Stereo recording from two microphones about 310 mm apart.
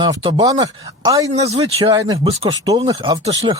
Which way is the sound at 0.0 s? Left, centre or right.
Centre.